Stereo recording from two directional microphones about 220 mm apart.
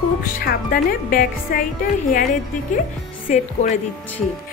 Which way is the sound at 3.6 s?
30° left (ahead or behind).